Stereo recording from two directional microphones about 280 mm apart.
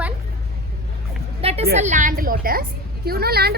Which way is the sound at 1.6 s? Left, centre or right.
Right.